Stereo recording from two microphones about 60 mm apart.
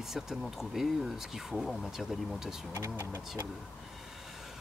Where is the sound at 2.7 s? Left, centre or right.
Right.